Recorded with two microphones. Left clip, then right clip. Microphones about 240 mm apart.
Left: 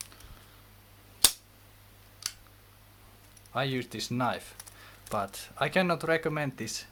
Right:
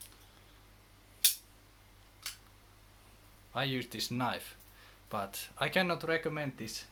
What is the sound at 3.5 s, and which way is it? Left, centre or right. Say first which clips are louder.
Speech: left 3 dB; left.